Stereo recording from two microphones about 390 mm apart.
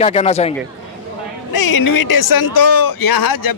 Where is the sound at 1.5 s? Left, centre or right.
Left.